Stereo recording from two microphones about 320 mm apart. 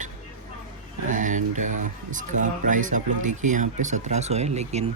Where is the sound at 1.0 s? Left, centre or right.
Right.